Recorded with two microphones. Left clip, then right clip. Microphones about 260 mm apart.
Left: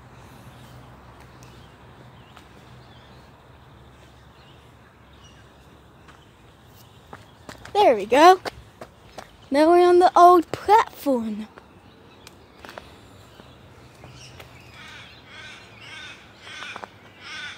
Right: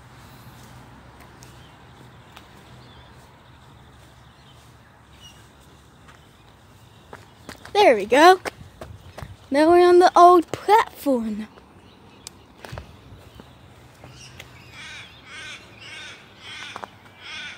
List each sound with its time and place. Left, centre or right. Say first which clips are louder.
7.1 s walk: right 1 dB; centre
8.4 s a sound: right 1 dB; centre
9.5 s speech: right 1 dB; centre
17.2 s crow: even; centre